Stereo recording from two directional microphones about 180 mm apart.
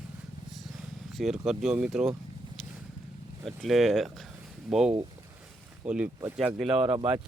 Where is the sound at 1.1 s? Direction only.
Centre (ahead or behind).